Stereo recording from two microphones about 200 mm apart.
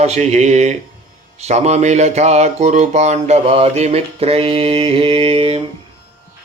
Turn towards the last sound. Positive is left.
turn(degrees=-25)  # may be behind; listen again after turning